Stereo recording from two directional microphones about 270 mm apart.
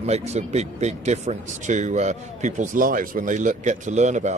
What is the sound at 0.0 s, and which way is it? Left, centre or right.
Speech, right.